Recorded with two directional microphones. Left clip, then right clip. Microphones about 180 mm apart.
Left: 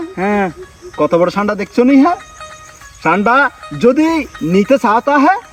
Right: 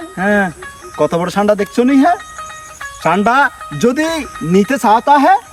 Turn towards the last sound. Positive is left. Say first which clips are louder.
# right 2 dB
turn(degrees=-20)  # may be behind; listen again after turning